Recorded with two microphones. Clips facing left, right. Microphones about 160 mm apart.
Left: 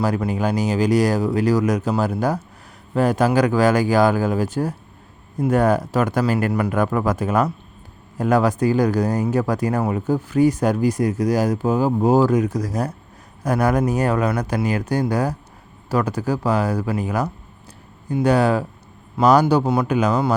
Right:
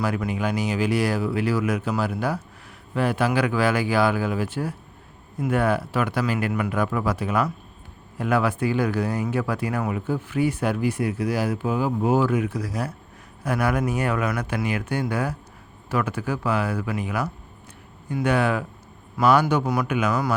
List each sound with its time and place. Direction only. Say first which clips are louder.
0.0 s speech: left 4 dB; 40° left (ahead or behind)